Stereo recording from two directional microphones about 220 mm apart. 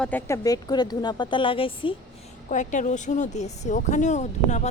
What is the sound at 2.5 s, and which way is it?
A woman's voice, 35° left (ahead or behind).